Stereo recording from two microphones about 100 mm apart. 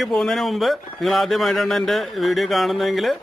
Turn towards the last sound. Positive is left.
turn(degrees=0)  # may be behind; listen again after turning